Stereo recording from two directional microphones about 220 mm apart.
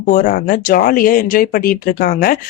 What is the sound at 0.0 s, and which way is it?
Speech, 40° left (ahead or behind).